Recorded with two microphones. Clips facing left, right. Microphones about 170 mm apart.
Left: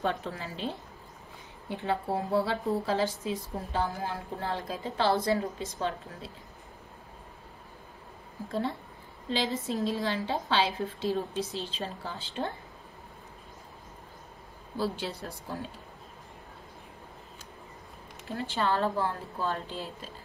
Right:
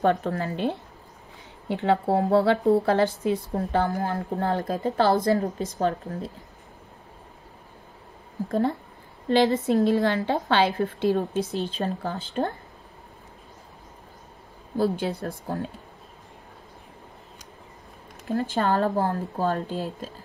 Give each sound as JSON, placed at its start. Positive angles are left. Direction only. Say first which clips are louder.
{"t": 0.0, "sound": "a woman's voice", "louder": "right 9 dB", "side_deg": -60}
{"t": 8.5, "sound": "speech", "louder": "right 7 dB", "side_deg": -50}
{"t": 9.3, "sound": "a woman's voice", "louder": "right 10 dB", "side_deg": -60}
{"t": 14.8, "sound": "speech", "louder": "right 8 dB", "side_deg": -50}
{"t": 18.2, "sound": "speech", "louder": "right 6 dB", "side_deg": -40}